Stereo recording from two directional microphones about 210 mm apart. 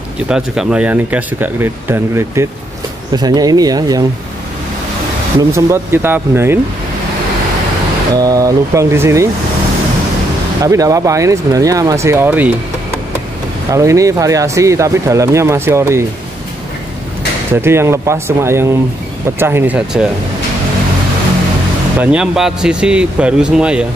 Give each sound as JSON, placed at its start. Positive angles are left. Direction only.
{"t": 0.3, "sound": "speech", "side_deg": -5}
{"t": 5.5, "sound": "speech", "side_deg": -10}
{"t": 8.1, "sound": "speech", "side_deg": -15}
{"t": 10.6, "sound": "speech", "side_deg": -15}
{"t": 13.7, "sound": "speech", "side_deg": -15}
{"t": 17.6, "sound": "speech", "side_deg": -10}
{"t": 22.0, "sound": "a man's voice", "side_deg": -5}